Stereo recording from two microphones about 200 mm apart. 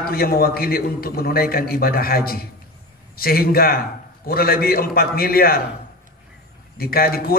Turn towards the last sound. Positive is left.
turn(degrees=50)  # may be behind; listen again after turning